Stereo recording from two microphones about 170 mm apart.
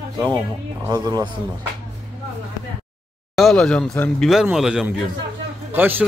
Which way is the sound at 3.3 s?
Centre (ahead or behind).